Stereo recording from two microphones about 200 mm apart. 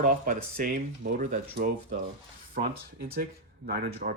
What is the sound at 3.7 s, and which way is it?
Speech, 55° right (ahead or behind).